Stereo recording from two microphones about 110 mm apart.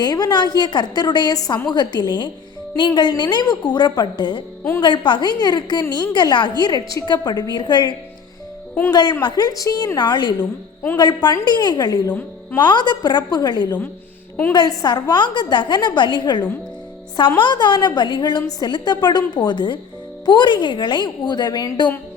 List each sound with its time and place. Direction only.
0.0 s a woman's voice: 35° left (ahead or behind)